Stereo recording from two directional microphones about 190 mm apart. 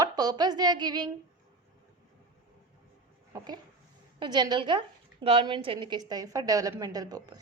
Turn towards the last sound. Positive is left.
turn(degrees=-20)  # may be behind; listen again after turning